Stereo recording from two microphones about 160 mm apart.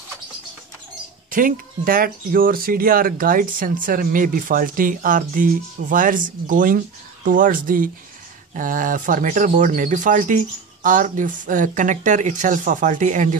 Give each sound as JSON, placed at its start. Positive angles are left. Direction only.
{"t": 1.3, "sound": "speech", "side_deg": -60}